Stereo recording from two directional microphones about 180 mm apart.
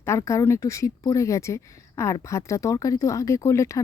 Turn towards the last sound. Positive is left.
turn(degrees=15)  # may be behind; listen again after turning